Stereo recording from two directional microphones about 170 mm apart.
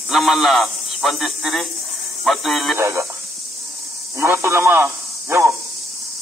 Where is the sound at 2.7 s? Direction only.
15° right (ahead or behind).